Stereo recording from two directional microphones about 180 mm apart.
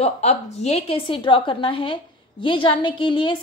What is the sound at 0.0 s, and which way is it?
A woman's voice, 40° left (ahead or behind).